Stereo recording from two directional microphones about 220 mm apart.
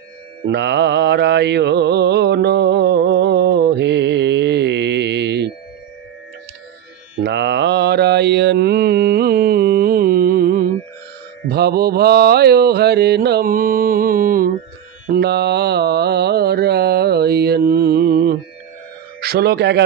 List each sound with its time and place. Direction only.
0.5 s mantra: 50° right (ahead or behind)
7.2 s mantra: 50° right (ahead or behind)
19.2 s a man's voice: 45° right (ahead or behind)